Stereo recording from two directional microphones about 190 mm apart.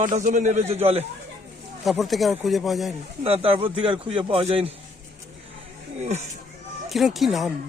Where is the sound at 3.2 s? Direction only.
30° right (ahead or behind).